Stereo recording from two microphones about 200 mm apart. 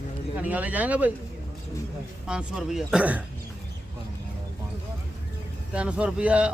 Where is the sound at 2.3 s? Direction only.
5° right (ahead or behind).